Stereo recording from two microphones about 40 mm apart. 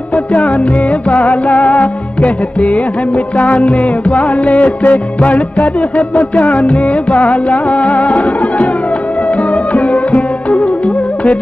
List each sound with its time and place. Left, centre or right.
0.1 s music: left
4.6 s music: left
9.7 s music: left